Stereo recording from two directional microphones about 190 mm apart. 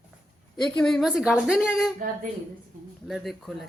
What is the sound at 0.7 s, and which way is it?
A woman's voice, centre (ahead or behind).